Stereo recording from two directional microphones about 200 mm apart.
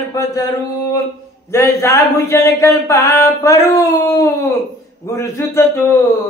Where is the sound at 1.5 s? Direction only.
15° left (ahead or behind).